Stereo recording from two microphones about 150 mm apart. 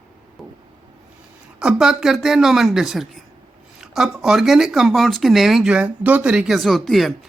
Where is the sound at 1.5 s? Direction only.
5° right (ahead or behind).